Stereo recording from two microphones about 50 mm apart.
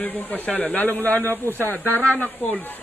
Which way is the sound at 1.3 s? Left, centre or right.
Right.